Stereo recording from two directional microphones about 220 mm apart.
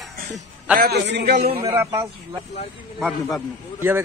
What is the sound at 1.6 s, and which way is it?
Speech, 15° right (ahead or behind).